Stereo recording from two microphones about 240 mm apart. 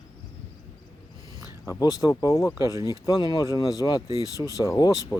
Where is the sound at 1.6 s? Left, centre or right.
Centre.